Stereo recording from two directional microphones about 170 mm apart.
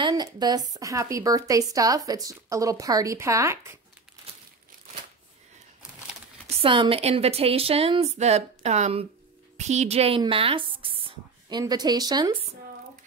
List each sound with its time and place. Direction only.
0.0 s a woman's voice: 25° right (ahead or behind)
6.5 s a woman's voice: 30° right (ahead or behind)